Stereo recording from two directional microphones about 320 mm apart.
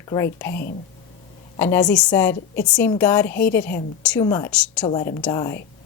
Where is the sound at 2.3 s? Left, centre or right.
Left.